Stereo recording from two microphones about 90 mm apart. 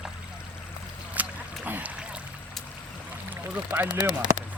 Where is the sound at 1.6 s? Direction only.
20° right (ahead or behind).